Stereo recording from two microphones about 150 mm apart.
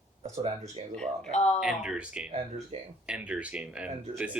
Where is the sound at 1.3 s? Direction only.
45° left (ahead or behind).